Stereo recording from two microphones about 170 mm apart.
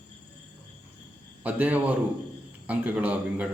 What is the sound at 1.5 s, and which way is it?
A man's voice, 10° right (ahead or behind).